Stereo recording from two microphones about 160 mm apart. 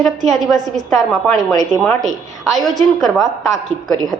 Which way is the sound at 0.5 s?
20° right (ahead or behind).